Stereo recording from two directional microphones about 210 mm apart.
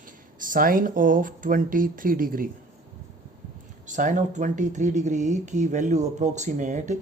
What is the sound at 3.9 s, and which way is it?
Speech, 35° right (ahead or behind).